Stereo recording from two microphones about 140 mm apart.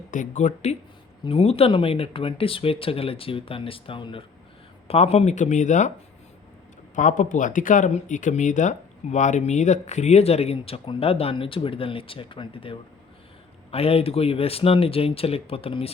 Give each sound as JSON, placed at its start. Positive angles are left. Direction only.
{"t": 0.1, "sound": "speech", "side_deg": 60}
{"t": 1.2, "sound": "speech", "side_deg": 40}
{"t": 4.9, "sound": "speech", "side_deg": 50}
{"t": 6.9, "sound": "speech", "side_deg": 65}